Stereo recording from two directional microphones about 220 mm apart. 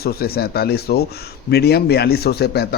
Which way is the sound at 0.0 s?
45° left (ahead or behind).